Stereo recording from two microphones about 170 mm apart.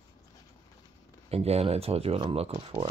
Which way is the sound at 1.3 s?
35° right (ahead or behind).